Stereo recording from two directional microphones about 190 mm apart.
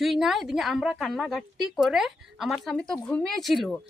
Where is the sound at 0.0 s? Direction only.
Centre (ahead or behind).